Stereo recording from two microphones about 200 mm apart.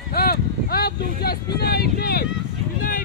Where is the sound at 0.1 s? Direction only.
50° left (ahead or behind).